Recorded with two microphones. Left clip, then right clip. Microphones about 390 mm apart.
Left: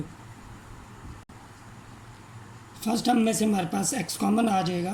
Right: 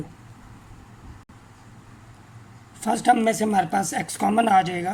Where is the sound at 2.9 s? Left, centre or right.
Centre.